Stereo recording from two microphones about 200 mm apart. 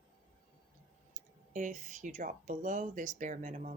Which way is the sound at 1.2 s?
40° right (ahead or behind).